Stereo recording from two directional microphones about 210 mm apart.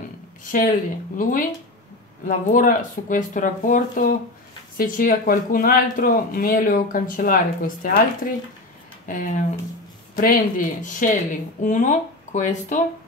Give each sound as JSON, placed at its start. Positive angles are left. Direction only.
{"t": 0.5, "sound": "speech", "side_deg": 40}